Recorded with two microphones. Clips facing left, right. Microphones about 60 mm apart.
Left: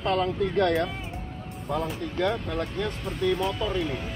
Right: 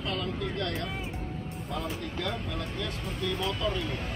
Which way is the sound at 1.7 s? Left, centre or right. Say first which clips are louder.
Left 6 dB; left.